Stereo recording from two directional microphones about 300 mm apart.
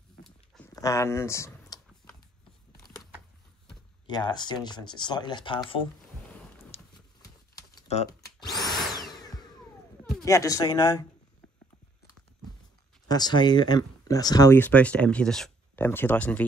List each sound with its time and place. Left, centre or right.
0.7 s a sound: centre
4.1 s speech: centre
6.7 s horse: centre
7.7 s typing: centre
10.1 s speech: centre
13.1 s speech: centre